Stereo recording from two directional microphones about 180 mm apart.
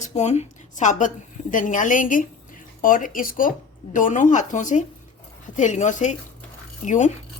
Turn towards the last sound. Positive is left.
turn(degrees=45)  # may be behind; listen again after turning